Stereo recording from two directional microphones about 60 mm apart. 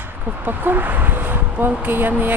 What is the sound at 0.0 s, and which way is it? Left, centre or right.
Speech, right.